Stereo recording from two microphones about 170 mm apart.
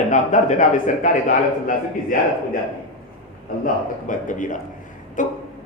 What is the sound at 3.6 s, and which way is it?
Speech, 50° left (ahead or behind).